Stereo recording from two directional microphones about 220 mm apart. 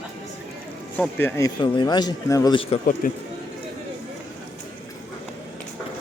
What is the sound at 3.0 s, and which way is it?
Speech, 40° left (ahead or behind).